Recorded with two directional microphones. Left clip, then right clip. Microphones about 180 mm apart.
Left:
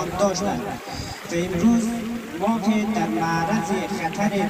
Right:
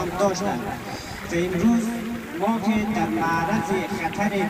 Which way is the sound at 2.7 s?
55° left (ahead or behind).